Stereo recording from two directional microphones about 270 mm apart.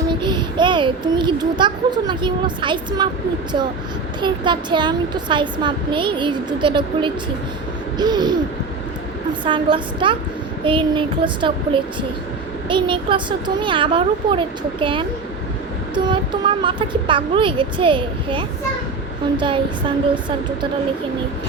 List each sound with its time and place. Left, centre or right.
0.1 s a child's voice: centre
4.2 s speech: centre
9.4 s a child's voice: centre
16.0 s a child's voice: centre